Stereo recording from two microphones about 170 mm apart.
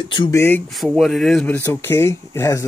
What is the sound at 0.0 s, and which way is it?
Speech, 25° left (ahead or behind).